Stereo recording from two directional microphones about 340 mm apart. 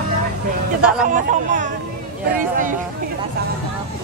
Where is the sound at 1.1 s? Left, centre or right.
Right.